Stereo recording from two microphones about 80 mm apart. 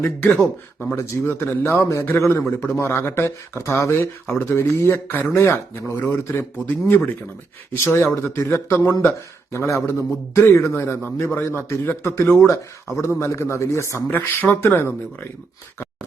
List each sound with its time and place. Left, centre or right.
0.0 s speech: left
0.9 s speech: left
8.0 s speech: left
14.1 s speech: left